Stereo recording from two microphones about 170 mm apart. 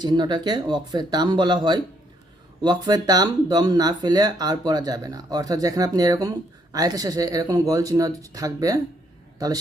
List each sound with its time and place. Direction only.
0.0 s speech: 25° right (ahead or behind)